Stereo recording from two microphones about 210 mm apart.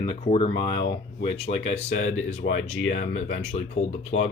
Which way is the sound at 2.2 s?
65° left (ahead or behind).